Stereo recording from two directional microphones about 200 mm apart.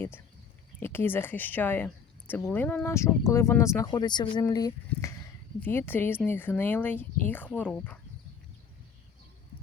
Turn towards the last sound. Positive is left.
turn(degrees=10)  # may be behind; listen again after turning